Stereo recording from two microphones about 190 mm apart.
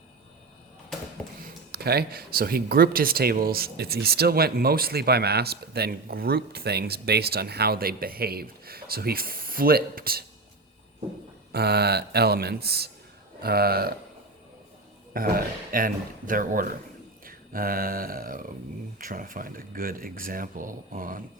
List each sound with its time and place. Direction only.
1.2 s a sound: 10° left (ahead or behind)
1.7 s speech: 55° right (ahead or behind)
11.5 s speech: 55° right (ahead or behind)
15.1 s speech: 50° right (ahead or behind)